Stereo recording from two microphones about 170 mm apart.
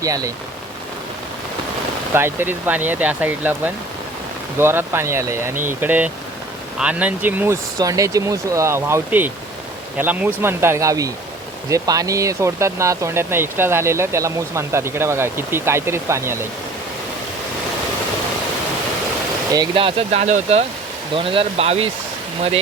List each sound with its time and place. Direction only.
2.1 s speech: 15° right (ahead or behind)
19.5 s speech: 30° right (ahead or behind)